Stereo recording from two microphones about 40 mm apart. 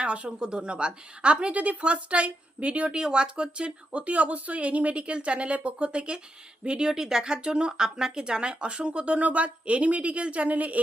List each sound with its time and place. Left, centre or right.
0.0 s a woman's voice: right
2.9 s a woman's voice: centre; by 10.8 s right